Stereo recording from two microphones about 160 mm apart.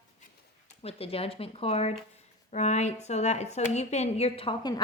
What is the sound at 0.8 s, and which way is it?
A woman's voice, 40° left (ahead or behind).